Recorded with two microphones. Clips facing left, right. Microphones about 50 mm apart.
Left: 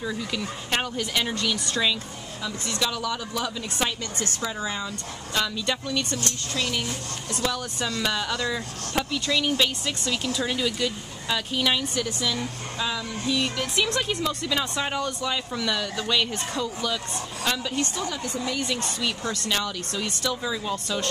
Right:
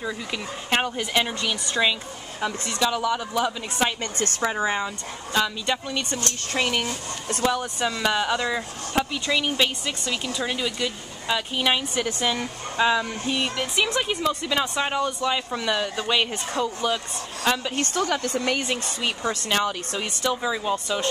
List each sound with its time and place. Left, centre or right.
0.0 s speech: right
4.0 s speech: right
5.3 s speech: centre
6.2 s speech: right
7.4 s speech: right
12.2 s speech: right
13.4 s speech: centre
17.7 s a woman's voice: right
18.6 s speech: right